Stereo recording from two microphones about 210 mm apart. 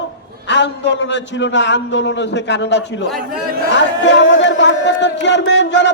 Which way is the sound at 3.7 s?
60° left (ahead or behind).